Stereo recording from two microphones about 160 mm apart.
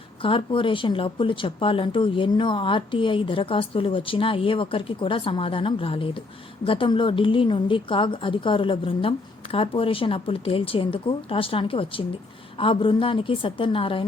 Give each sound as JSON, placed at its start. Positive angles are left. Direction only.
{"t": 0.2, "sound": "speech", "side_deg": 35}